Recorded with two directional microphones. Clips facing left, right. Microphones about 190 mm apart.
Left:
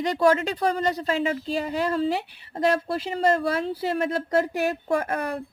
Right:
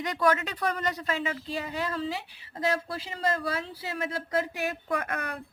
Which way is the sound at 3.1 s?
30° left (ahead or behind).